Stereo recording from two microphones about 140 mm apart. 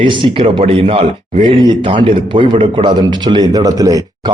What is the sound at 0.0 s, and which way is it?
Speech, 35° right (ahead or behind).